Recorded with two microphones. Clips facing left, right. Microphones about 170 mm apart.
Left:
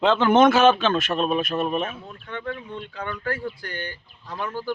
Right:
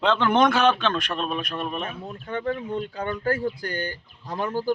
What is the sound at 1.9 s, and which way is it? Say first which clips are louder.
Speech: right 3 dB; 40° right (ahead or behind).